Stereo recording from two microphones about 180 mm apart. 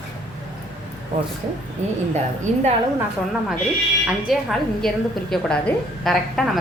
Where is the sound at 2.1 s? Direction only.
35° right (ahead or behind).